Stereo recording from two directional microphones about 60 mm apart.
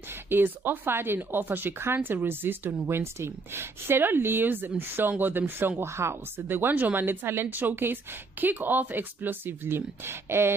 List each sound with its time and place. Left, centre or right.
0.3 s speech: right
6.4 s speech: right